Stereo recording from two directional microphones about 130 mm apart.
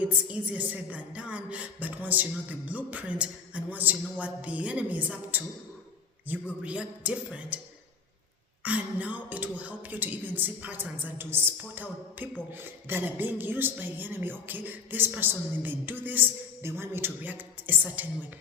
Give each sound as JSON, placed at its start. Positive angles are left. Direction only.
{"t": 0.0, "sound": "a woman's voice", "side_deg": -10}
{"t": 8.6, "sound": "a woman's voice", "side_deg": -10}